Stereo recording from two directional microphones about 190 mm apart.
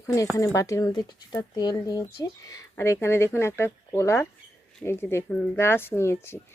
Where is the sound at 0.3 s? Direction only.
15° left (ahead or behind).